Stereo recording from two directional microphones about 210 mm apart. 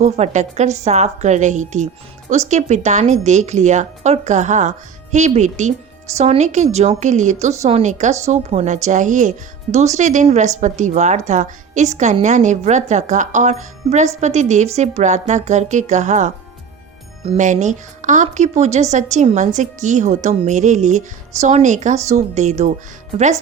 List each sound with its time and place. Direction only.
0.0 s a woman's voice: 30° right (ahead or behind)